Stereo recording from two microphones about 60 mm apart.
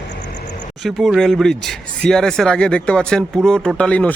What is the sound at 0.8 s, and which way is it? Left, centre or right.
Speech, centre.